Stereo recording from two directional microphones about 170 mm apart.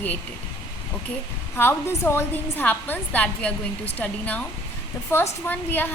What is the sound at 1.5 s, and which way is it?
A woman's voice, 15° left (ahead or behind).